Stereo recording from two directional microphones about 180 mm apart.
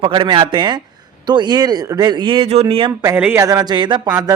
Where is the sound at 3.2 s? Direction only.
15° right (ahead or behind).